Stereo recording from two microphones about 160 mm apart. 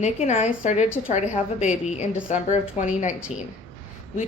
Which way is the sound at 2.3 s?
50° left (ahead or behind).